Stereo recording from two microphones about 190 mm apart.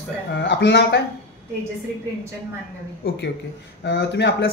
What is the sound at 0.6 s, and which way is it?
Speech, 60° left (ahead or behind).